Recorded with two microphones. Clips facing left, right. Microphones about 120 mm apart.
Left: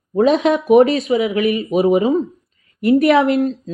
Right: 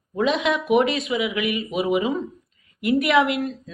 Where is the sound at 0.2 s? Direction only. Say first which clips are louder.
Left 7 dB; 40° left (ahead or behind).